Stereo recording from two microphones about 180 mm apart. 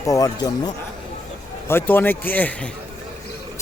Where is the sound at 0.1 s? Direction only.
20° left (ahead or behind).